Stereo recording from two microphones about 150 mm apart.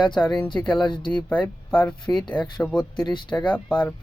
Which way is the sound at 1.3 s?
10° left (ahead or behind).